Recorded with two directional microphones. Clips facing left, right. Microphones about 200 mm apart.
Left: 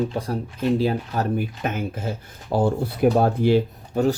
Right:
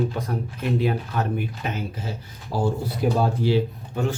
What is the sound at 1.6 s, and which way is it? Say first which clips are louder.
Speech: left 4 dB; 50° left (ahead or behind).